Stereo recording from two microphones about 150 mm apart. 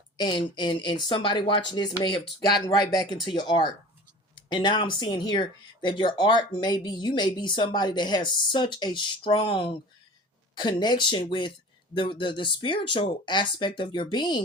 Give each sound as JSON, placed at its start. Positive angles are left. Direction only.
{"t": 0.2, "sound": "speech", "side_deg": 30}